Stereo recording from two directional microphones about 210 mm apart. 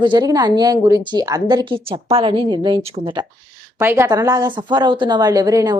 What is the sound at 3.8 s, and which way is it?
A woman's voice, 10° right (ahead or behind).